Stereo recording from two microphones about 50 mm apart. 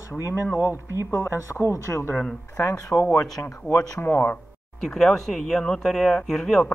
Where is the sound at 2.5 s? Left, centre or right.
Left.